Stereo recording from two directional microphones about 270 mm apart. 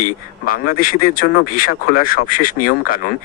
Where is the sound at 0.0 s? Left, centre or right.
Left.